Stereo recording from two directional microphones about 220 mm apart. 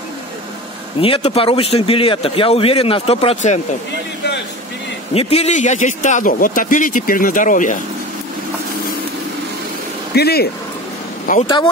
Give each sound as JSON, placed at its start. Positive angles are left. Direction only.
{"t": 1.0, "sound": "a man's voice", "side_deg": 25}
{"t": 5.1, "sound": "speech", "side_deg": 30}
{"t": 10.1, "sound": "speech", "side_deg": 45}
{"t": 11.4, "sound": "a man's voice", "side_deg": 20}